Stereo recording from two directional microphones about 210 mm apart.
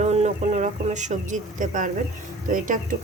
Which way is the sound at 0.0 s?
30° right (ahead or behind).